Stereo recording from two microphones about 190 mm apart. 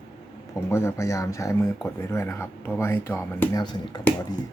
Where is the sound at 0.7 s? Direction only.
15° left (ahead or behind).